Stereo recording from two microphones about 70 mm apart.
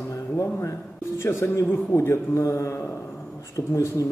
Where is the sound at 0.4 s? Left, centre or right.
Left.